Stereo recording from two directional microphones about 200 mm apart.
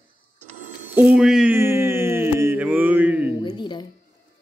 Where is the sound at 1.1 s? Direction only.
5° right (ahead or behind).